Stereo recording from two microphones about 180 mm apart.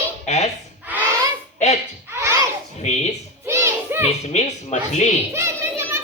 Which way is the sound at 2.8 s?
40° left (ahead or behind).